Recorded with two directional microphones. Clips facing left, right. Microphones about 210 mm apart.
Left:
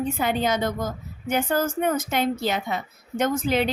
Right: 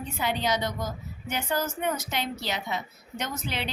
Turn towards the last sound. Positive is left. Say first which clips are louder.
# left 11 dB
turn(degrees=45)  # may be behind; listen again after turning